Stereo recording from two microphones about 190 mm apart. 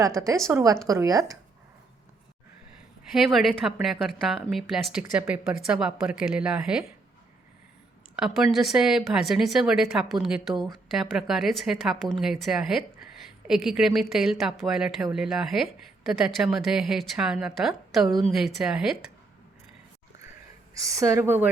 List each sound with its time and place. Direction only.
0.4 s a woman's voice: 15° right (ahead or behind)
3.3 s speech: centre (ahead or behind)
5.2 s a woman's voice: 15° right (ahead or behind)
5.7 s speech: 5° right (ahead or behind)
8.1 s speech: 5° right (ahead or behind)
20.7 s a woman's voice: 15° right (ahead or behind)